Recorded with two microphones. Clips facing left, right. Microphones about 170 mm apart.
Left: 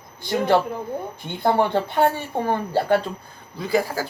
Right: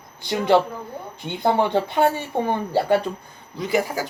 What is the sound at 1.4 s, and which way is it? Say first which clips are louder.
Speech: even; 15° right (ahead or behind).